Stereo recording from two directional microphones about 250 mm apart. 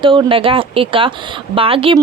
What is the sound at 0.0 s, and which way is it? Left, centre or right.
Speech, centre.